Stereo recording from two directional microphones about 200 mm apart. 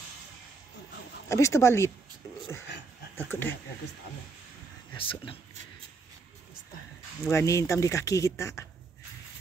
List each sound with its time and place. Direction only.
1.3 s speech: 15° left (ahead or behind)
3.2 s speech: 10° left (ahead or behind)
4.9 s speech: 25° left (ahead or behind)
7.2 s speech: 15° left (ahead or behind)